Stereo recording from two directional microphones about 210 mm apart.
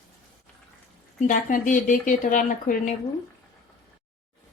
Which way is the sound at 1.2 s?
40° left (ahead or behind).